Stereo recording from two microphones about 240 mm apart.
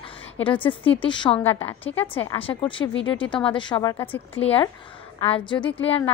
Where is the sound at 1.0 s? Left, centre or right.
Left.